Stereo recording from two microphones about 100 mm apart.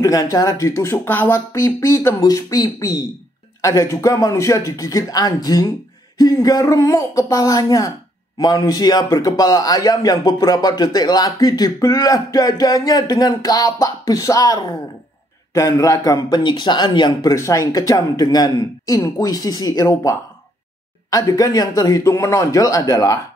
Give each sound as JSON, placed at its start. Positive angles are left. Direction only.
{"t": 0.0, "sound": "speech", "side_deg": 35}
{"t": 17.3, "sound": "speech", "side_deg": 35}